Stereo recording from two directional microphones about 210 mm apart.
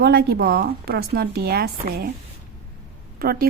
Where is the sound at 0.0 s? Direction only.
50° right (ahead or behind).